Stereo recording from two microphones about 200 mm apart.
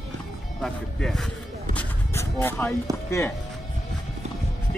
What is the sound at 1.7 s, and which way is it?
Music, 10° left (ahead or behind).